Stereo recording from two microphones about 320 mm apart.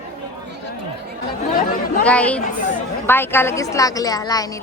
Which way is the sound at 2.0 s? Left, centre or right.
Centre.